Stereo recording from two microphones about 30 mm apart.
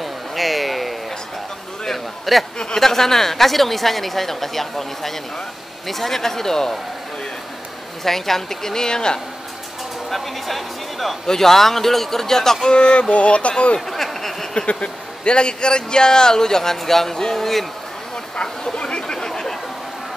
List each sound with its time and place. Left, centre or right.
0.0 s a sound: centre
1.9 s a man's voice: centre
2.6 s a woman's voice: centre
8.0 s a woman's voice: centre
10.0 s speech: centre
11.2 s a woman's voice: centre
12.6 s speech: left
13.7 s a sound: centre
14.7 s speech: left
15.3 s speech: left; by 17.6 s centre
18.3 s a sound: left